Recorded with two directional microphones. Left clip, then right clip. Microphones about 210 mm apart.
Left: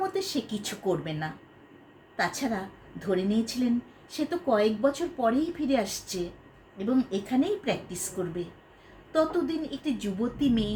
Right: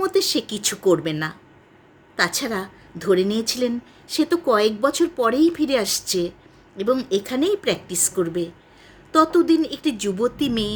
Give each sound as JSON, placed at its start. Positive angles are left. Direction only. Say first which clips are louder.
{"t": 0.0, "sound": "speech", "louder": "right 9 dB", "side_deg": -50}
{"t": 9.1, "sound": "speech", "louder": "right 10 dB", "side_deg": -50}